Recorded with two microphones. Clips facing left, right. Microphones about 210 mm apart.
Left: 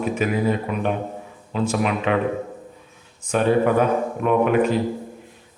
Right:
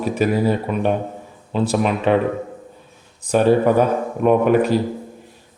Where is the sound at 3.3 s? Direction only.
35° right (ahead or behind).